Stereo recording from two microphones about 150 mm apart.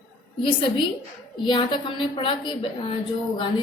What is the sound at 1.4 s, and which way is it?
A woman's voice, 30° left (ahead or behind).